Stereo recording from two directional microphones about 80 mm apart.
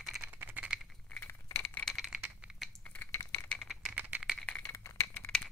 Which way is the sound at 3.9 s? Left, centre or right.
Centre.